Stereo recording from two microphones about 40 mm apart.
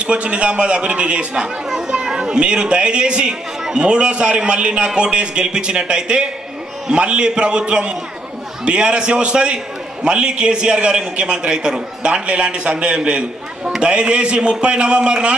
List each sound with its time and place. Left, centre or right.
0.0 s a man's voice: right
1.3 s a man's voice: centre